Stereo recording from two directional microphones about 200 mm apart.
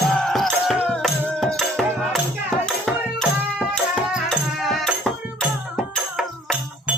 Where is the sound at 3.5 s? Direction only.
Centre (ahead or behind).